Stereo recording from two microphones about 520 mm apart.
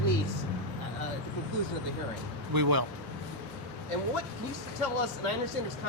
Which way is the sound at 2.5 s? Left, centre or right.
Right.